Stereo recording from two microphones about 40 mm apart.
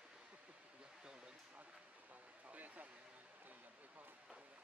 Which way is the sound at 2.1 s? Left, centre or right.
Right.